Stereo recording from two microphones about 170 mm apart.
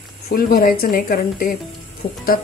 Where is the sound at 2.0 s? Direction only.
40° left (ahead or behind).